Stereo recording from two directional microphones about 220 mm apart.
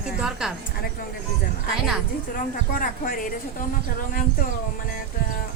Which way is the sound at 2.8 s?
40° left (ahead or behind).